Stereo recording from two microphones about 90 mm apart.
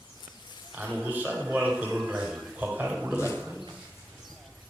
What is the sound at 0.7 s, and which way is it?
A man's voice, 20° right (ahead or behind).